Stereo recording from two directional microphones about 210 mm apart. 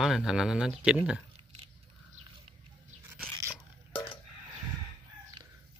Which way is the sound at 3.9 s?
25° left (ahead or behind).